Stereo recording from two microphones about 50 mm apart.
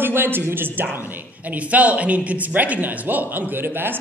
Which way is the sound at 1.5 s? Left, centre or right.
Right.